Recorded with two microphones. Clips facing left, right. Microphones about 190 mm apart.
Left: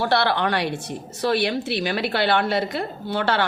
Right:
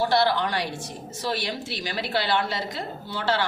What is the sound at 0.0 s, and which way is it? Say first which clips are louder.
A woman's voice: left 1 dB; 65° left (ahead or behind).